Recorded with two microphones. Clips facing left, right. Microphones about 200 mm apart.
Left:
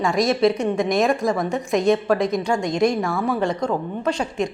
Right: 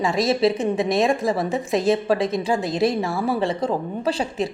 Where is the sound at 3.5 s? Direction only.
30° right (ahead or behind).